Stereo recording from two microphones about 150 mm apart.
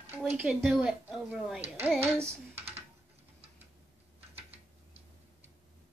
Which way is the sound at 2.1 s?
15° right (ahead or behind).